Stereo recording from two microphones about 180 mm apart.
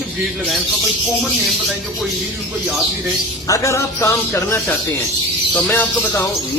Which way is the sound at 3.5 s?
15° left (ahead or behind).